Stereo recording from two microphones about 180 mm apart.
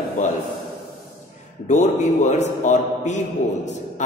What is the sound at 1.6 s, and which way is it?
A man's voice, 40° left (ahead or behind).